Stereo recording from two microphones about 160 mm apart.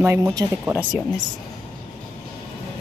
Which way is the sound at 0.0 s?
15° right (ahead or behind).